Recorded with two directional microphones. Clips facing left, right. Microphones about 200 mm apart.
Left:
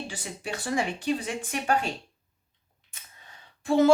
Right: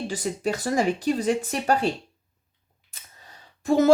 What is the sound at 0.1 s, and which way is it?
Speech, 40° right (ahead or behind).